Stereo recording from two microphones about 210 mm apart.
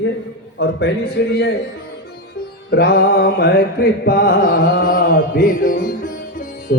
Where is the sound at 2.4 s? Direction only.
50° left (ahead or behind).